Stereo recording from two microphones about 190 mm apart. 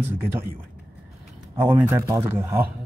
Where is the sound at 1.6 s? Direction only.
10° right (ahead or behind).